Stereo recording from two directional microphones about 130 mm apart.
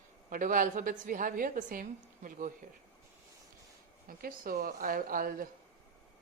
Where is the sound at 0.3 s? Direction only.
90° right.